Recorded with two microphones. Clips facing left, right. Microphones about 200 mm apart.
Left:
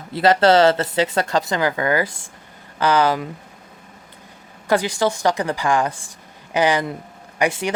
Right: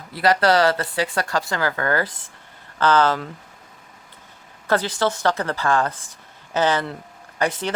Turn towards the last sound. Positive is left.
turn(degrees=10)  # may be behind; listen again after turning